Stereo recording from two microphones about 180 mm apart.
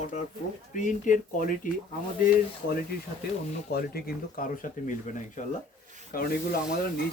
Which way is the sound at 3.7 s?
60° left (ahead or behind).